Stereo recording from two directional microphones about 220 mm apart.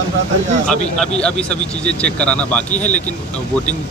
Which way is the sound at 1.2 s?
5° left (ahead or behind).